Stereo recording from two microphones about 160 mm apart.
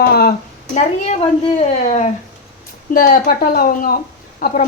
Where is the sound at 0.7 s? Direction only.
40° left (ahead or behind).